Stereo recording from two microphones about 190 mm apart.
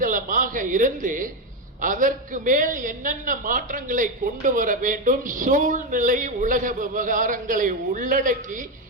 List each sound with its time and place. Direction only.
0.0 s a man's voice: 45° right (ahead or behind)